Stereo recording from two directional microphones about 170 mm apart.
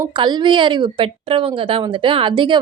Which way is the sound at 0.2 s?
25° right (ahead or behind).